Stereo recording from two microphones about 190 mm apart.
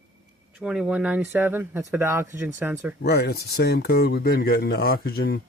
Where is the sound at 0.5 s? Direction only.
5° right (ahead or behind).